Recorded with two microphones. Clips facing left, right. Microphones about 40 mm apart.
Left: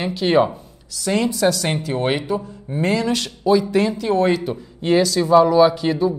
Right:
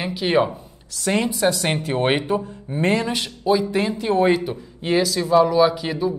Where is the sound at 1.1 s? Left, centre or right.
Right.